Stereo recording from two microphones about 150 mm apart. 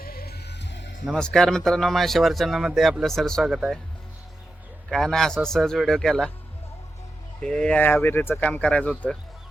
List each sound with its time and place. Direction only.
0.0 s music: 90° left
1.0 s speech: 5° left (ahead or behind)
4.9 s speech: 5° left (ahead or behind)
7.4 s speech: 5° left (ahead or behind)